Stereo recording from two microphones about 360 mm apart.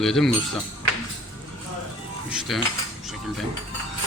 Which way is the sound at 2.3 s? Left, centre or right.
Centre.